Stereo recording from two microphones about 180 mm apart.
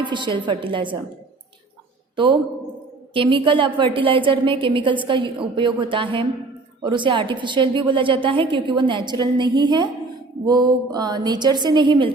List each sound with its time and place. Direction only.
0.0 s a woman's voice: 25° right (ahead or behind)
3.2 s a woman's voice: 30° right (ahead or behind)